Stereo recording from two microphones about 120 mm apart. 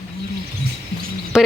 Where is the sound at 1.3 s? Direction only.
5° right (ahead or behind).